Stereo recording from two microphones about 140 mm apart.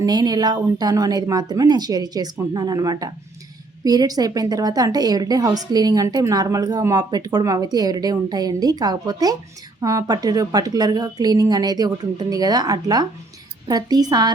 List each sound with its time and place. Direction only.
0.0 s a woman's voice: 30° right (ahead or behind)